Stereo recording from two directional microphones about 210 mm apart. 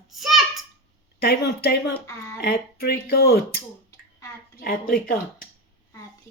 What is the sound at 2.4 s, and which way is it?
A woman's voice, 50° left (ahead or behind).